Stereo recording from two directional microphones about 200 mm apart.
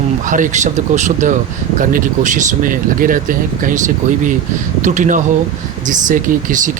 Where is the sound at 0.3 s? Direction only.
40° right (ahead or behind).